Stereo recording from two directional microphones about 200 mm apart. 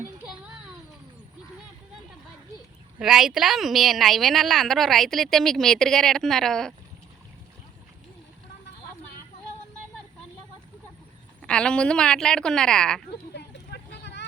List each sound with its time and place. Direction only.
3.0 s speech: centre (ahead or behind)
11.4 s speech: 5° left (ahead or behind)
13.3 s vehicle: 55° left (ahead or behind)